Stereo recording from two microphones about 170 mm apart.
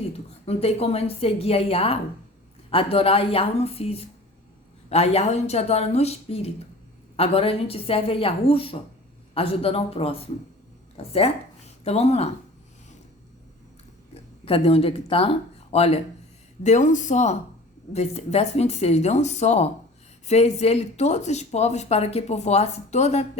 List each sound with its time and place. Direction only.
0.0 s speech: 35° left (ahead or behind)
14.1 s speech: 35° left (ahead or behind)